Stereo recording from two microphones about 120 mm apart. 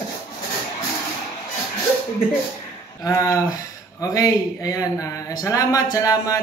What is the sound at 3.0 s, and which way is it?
Speech, 25° left (ahead or behind).